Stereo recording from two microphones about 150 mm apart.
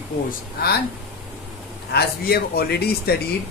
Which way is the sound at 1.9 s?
90° left.